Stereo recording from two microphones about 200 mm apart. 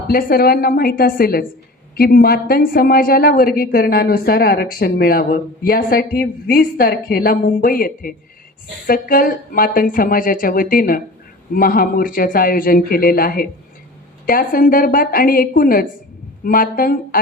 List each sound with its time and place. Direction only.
0.1 s a woman's voice: 50° left (ahead or behind)